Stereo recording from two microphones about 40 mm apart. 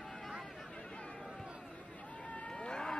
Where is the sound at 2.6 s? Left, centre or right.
Centre.